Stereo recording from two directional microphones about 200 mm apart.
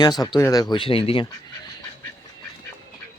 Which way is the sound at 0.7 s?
25° left (ahead or behind).